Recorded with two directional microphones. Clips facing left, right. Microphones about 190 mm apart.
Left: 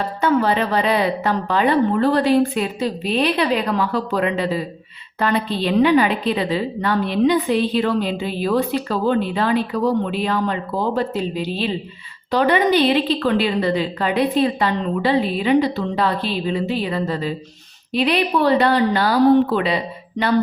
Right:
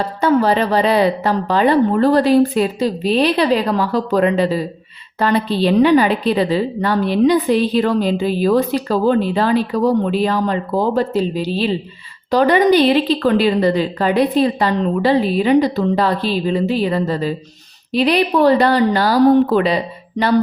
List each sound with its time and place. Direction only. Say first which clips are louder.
0.2 s a woman's voice: right 3 dB; 35° right (ahead or behind)